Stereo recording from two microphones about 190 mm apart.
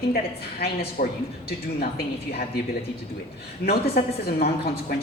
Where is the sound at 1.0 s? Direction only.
45° left (ahead or behind).